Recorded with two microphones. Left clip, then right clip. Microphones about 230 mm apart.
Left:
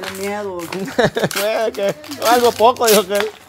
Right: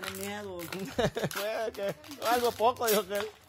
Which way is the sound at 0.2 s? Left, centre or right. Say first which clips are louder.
Left 15 dB; right.